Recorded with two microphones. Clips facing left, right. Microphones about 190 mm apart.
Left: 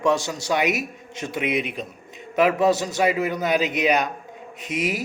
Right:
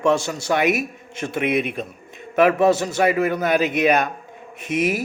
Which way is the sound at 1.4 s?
50° right (ahead or behind).